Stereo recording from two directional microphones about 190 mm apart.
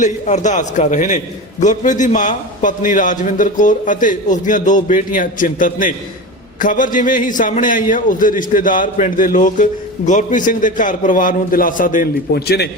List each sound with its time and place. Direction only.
0.0 s a man's voice: 40° left (ahead or behind); by 12.6 s 55° left (ahead or behind)